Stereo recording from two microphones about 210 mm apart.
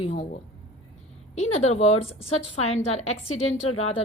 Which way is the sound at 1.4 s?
30° left (ahead or behind).